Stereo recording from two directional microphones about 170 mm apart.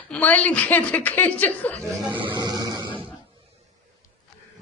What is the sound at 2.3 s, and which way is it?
Music, 25° right (ahead or behind).